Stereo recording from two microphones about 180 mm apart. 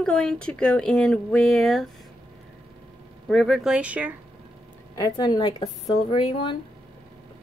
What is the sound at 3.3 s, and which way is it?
Speech, centre (ahead or behind).